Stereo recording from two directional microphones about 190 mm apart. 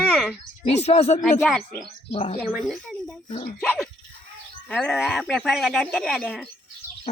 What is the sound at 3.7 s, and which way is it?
Dog, centre (ahead or behind).